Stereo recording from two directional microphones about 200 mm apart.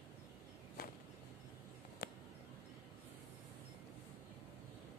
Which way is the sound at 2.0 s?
50° left (ahead or behind).